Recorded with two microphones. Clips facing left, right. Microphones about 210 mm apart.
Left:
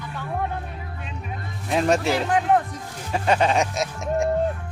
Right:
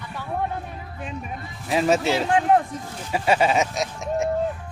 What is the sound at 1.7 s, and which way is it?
Speech, centre (ahead or behind).